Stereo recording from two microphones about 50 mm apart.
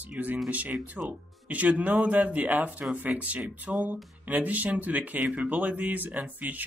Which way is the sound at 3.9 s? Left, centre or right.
Right.